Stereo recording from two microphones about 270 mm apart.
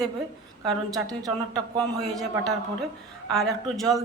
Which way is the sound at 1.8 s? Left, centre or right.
Centre.